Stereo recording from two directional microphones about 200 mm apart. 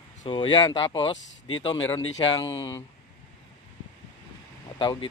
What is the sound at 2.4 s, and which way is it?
Speech, 15° left (ahead or behind).